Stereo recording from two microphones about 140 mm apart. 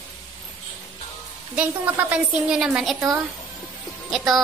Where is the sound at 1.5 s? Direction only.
10° right (ahead or behind).